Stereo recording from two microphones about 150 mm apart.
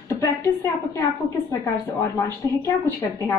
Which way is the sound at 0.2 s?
20° left (ahead or behind).